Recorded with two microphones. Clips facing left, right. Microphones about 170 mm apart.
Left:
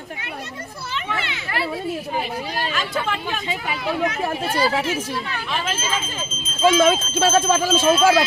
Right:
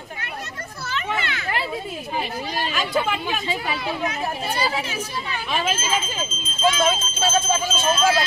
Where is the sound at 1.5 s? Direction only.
20° right (ahead or behind).